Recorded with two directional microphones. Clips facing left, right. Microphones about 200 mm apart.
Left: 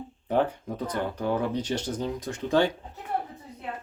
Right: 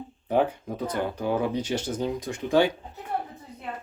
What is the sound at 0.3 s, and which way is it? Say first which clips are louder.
Speech: right 2 dB; 10° right (ahead or behind).